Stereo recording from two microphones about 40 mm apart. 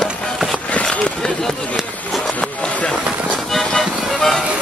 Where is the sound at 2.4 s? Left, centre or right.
Left.